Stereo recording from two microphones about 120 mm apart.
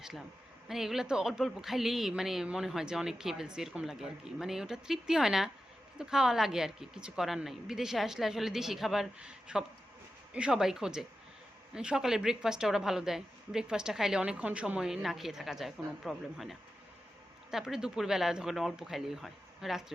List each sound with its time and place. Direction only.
0.0 s a woman's voice: 5° right (ahead or behind)